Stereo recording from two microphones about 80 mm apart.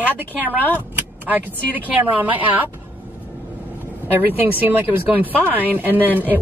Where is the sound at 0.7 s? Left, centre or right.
Centre.